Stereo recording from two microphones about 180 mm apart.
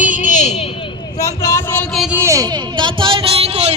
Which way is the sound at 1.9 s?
Centre (ahead or behind).